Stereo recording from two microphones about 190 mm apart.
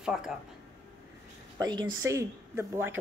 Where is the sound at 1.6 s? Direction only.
20° right (ahead or behind).